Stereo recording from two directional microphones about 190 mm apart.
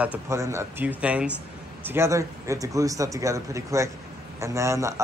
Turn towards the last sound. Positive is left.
turn(degrees=-15)  # may be behind; listen again after turning